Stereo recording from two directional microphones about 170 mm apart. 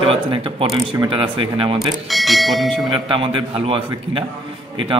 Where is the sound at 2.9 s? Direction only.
30° right (ahead or behind).